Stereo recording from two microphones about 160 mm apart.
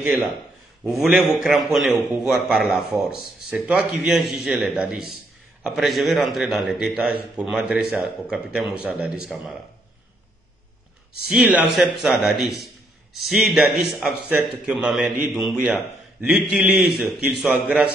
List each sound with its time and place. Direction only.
0.0 s a man's voice: 15° right (ahead or behind)
0.8 s a man's voice: centre (ahead or behind)
11.2 s a man's voice: 10° right (ahead or behind)